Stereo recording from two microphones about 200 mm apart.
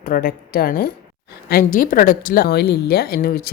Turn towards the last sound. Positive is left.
turn(degrees=50)  # may be behind; listen again after turning